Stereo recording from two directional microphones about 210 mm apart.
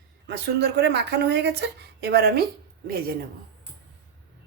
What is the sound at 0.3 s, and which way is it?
A woman's voice, 50° right (ahead or behind).